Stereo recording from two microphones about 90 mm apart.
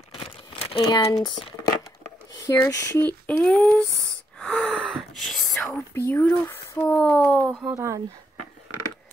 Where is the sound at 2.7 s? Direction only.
35° left (ahead or behind).